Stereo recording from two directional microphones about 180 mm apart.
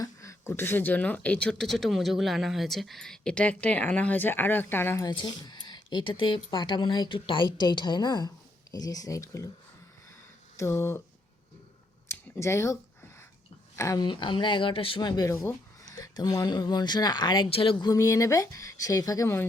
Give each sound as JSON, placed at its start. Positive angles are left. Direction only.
{"t": 0.0, "sound": "speech", "side_deg": 15}
{"t": 10.6, "sound": "speech", "side_deg": 15}
{"t": 12.0, "sound": "a sound", "side_deg": 15}
{"t": 13.7, "sound": "speech", "side_deg": 20}